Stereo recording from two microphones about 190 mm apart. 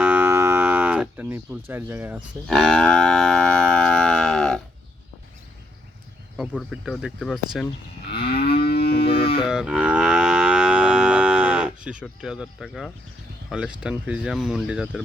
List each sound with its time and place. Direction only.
0.0 s cattle: 10° right (ahead or behind)
2.5 s livestock: centre (ahead or behind)
6.3 s speech: centre (ahead or behind)
8.2 s moo: 55° left (ahead or behind)
8.8 s livestock: 30° left (ahead or behind)
9.5 s livestock: 5° right (ahead or behind)
12.2 s speech: 5° right (ahead or behind)